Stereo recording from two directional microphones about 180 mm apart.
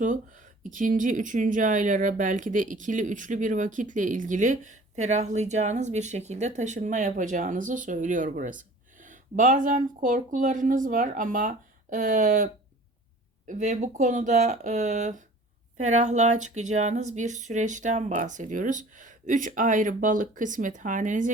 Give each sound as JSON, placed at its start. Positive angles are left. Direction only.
{"t": 0.0, "sound": "speech", "side_deg": -45}
{"t": 13.5, "sound": "speech", "side_deg": -45}